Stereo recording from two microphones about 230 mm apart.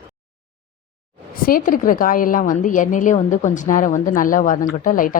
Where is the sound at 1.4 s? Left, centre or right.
Left.